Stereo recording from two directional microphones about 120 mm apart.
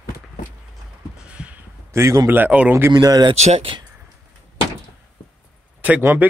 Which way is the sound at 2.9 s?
35° right (ahead or behind).